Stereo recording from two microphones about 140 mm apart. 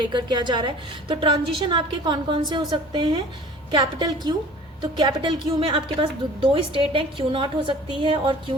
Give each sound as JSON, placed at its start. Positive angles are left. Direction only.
{"t": 0.0, "sound": "a woman's voice", "side_deg": -30}